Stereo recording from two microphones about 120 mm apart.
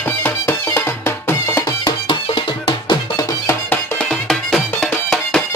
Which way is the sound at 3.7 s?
5° left (ahead or behind).